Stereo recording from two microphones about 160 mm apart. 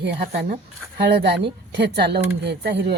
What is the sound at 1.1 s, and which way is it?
Speech, 90° right.